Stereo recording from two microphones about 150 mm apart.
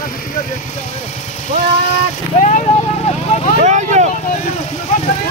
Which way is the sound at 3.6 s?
50° right (ahead or behind).